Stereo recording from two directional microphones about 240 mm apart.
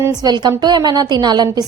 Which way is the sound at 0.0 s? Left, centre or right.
Centre.